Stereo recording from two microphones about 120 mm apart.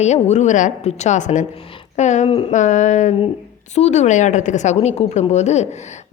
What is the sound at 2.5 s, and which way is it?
Speech, 90° left.